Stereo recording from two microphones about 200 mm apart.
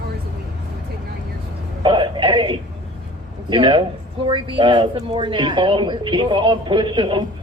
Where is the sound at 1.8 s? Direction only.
25° right (ahead or behind).